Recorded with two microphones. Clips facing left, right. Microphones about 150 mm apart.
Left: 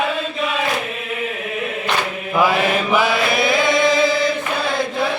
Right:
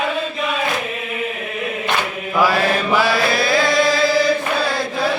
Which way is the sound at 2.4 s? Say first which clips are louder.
Even; 20° left (ahead or behind).